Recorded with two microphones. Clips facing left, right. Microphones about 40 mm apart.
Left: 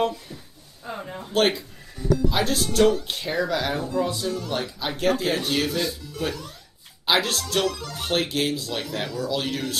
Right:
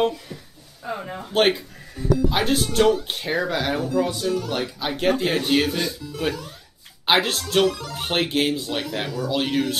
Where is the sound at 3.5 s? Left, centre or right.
Right.